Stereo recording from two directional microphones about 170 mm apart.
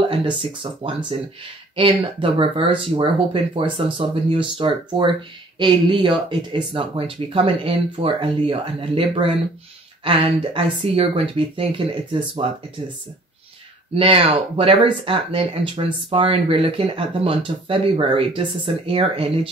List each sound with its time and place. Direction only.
0.1 s speech: 30° right (ahead or behind)
13.9 s speech: 35° right (ahead or behind)